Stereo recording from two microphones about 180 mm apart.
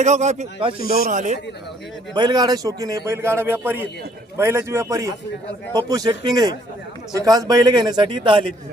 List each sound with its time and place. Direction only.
0.0 s speech: 40° right (ahead or behind)
0.9 s speech: 50° right (ahead or behind)
2.1 s a man's voice: 25° right (ahead or behind)